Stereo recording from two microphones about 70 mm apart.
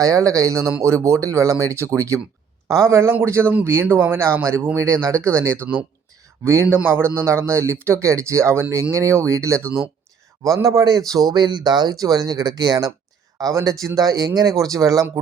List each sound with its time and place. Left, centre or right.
0.0 s speech: right
10.8 s speech: right
13.4 s speech: right